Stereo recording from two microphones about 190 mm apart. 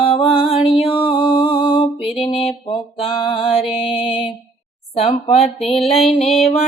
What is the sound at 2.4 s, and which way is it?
Speech, 30° left (ahead or behind).